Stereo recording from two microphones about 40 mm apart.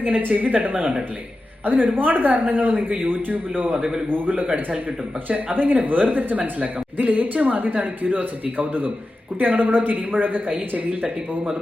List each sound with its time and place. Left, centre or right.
0.2 s speech: right